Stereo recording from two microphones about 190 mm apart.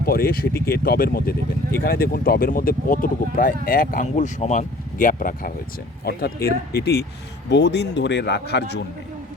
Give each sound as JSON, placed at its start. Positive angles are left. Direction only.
{"t": 0.0, "sound": "speech", "side_deg": 55}